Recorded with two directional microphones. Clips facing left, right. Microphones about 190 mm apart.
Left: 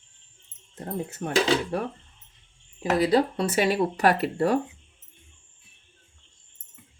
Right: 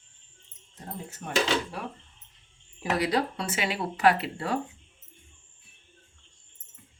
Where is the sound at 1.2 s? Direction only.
55° left (ahead or behind).